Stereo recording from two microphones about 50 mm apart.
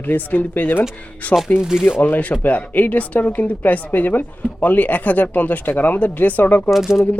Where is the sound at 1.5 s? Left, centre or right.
Centre.